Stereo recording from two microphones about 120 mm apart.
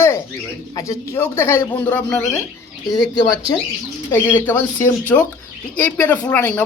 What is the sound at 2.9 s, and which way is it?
Speech, 35° left (ahead or behind).